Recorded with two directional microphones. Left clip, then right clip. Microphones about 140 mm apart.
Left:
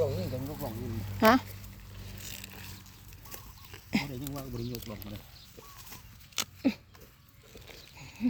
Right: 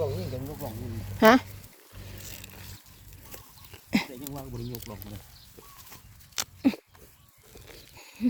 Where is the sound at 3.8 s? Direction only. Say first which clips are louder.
Right 4 dB; 90° right.